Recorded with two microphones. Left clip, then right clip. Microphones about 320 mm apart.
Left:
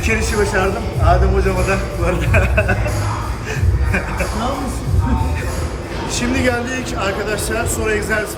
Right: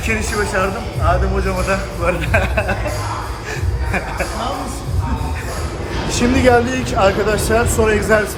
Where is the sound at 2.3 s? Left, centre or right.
Right.